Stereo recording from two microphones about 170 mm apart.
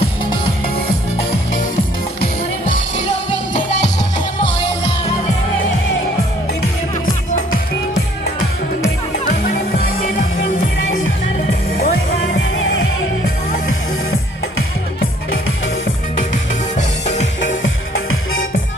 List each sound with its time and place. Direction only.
9.2 s music: 60° left (ahead or behind)
11.8 s music: 75° left (ahead or behind)
16.7 s music: 45° left (ahead or behind)